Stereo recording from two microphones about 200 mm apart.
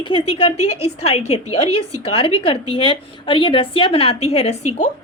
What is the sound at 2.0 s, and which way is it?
A woman's voice, 25° left (ahead or behind).